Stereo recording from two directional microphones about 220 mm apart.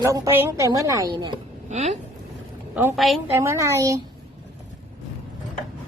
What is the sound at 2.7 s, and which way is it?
Speech, 5° right (ahead or behind).